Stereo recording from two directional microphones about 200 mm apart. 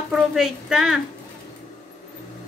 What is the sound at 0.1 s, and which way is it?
Speech, centre (ahead or behind).